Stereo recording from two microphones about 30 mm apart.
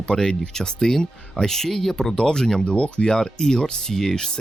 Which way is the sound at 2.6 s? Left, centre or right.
Left.